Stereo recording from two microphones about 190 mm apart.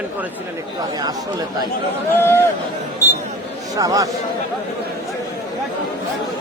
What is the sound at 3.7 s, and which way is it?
Speech, 20° right (ahead or behind).